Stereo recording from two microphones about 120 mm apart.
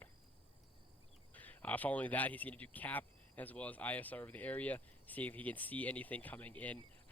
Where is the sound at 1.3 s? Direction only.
15° left (ahead or behind).